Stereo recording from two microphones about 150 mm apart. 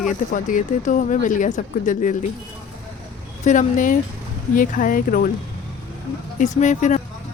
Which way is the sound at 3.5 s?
60° left (ahead or behind).